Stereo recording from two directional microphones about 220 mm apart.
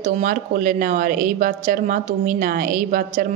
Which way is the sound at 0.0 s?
35° right (ahead or behind).